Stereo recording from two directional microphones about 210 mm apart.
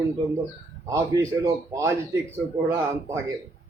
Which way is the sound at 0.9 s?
15° right (ahead or behind).